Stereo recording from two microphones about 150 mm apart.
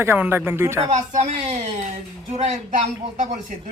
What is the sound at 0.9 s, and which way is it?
Speech, 50° right (ahead or behind).